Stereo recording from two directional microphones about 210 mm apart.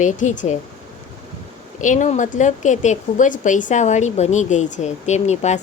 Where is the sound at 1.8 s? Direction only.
35° left (ahead or behind).